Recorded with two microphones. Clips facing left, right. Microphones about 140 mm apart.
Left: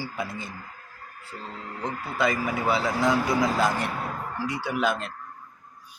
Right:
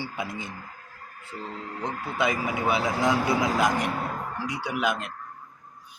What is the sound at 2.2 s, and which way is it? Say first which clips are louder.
A man's voice: left 1 dB; 20° right (ahead or behind).